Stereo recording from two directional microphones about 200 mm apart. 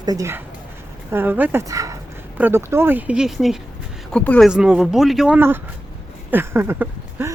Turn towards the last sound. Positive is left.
turn(degrees=-10)  # may be behind; listen again after turning